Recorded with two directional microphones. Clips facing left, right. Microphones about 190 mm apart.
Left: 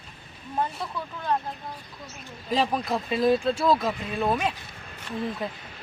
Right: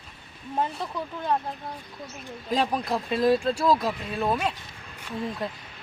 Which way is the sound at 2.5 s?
Centre (ahead or behind).